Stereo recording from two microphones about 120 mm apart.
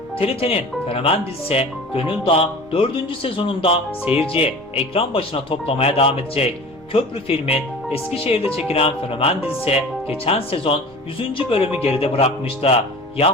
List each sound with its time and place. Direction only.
0.2 s speech: 50° left (ahead or behind)